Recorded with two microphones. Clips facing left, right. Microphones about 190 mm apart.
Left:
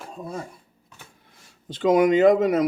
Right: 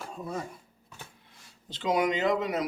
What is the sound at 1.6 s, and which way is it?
Speech, 50° left (ahead or behind).